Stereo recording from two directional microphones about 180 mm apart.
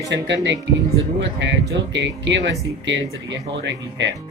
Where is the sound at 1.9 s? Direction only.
85° right.